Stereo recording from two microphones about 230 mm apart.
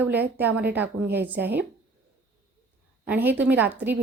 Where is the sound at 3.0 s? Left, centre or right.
Centre.